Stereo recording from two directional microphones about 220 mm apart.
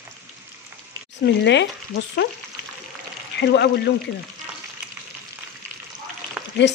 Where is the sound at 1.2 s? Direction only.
50° left (ahead or behind).